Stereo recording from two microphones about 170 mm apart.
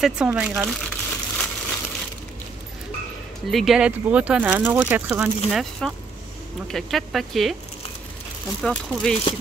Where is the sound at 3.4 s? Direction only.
Centre (ahead or behind).